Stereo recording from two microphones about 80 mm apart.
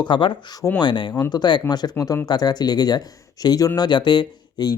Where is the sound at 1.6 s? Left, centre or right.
Left.